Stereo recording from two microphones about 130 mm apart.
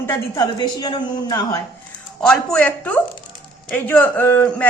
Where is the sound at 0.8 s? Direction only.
35° left (ahead or behind).